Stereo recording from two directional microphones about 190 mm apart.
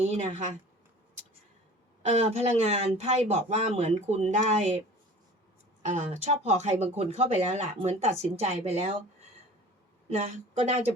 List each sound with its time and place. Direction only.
0.0 s speech: 40° right (ahead or behind)
2.0 s speech: 35° right (ahead or behind)
5.8 s speech: 35° right (ahead or behind)
10.1 s speech: 35° right (ahead or behind)